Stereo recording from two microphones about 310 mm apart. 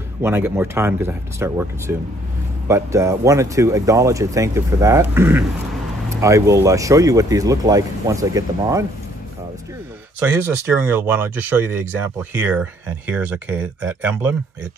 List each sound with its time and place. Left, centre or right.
0.2 s speech: centre
10.2 s speech: centre